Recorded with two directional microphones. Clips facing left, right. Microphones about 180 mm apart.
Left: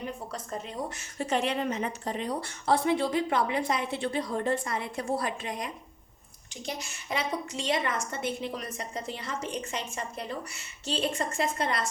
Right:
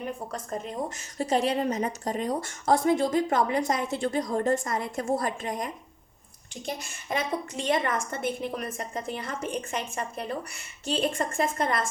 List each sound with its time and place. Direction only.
0.9 s speech: 40° right (ahead or behind)